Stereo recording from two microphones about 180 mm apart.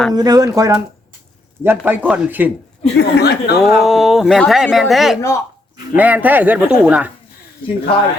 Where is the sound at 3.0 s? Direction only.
65° left (ahead or behind).